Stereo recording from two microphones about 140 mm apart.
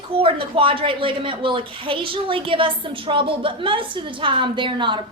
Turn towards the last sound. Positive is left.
turn(degrees=-35)  # may be behind; listen again after turning